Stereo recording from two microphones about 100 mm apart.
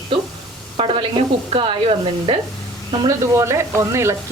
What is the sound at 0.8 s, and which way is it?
Rub, 65° right (ahead or behind).